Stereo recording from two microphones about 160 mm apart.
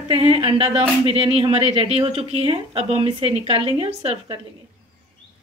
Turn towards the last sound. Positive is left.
turn(degrees=-35)  # may be behind; listen again after turning